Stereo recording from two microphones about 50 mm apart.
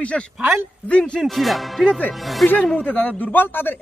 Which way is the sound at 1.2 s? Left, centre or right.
Centre.